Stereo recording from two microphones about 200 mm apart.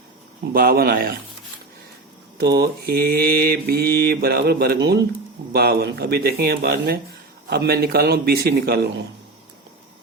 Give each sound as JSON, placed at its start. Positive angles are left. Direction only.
{"t": 0.5, "sound": "mantra", "side_deg": -45}
{"t": 2.4, "sound": "mantra", "side_deg": -55}